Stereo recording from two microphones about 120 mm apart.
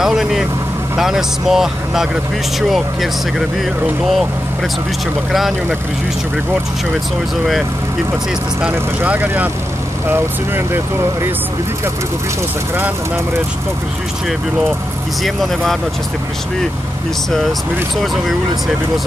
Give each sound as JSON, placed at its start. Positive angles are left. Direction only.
{"t": 0.0, "sound": "speech", "side_deg": -5}
{"t": 8.7, "sound": "speech", "side_deg": -15}
{"t": 15.2, "sound": "speech", "side_deg": 0}
{"t": 17.3, "sound": "speech", "side_deg": 0}